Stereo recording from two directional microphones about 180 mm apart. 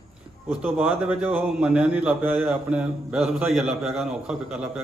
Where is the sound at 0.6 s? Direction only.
10° right (ahead or behind).